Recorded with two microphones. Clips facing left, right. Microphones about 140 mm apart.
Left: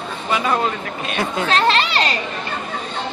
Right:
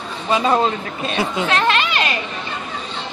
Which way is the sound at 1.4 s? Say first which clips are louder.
Left 3 dB; 30° left (ahead or behind).